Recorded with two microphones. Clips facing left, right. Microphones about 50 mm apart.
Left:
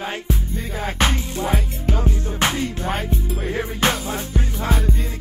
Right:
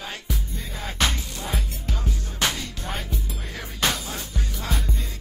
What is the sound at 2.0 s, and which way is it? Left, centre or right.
Music, left.